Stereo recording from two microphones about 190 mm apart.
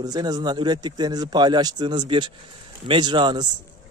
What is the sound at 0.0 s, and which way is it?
Speech, 20° right (ahead or behind).